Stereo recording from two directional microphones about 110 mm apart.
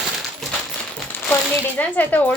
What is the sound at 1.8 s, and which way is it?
Speech, 15° left (ahead or behind).